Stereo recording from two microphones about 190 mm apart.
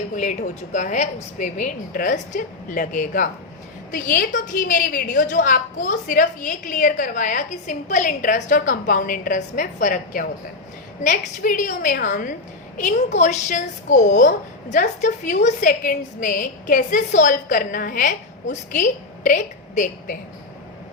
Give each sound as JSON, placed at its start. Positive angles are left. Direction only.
{"t": 0.2, "sound": "a woman's voice", "side_deg": 40}